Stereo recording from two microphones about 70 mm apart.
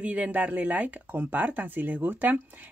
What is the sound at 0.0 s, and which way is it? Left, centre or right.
Speech, centre.